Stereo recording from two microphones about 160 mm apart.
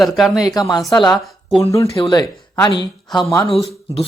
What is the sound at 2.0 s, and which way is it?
Speech, 25° left (ahead or behind).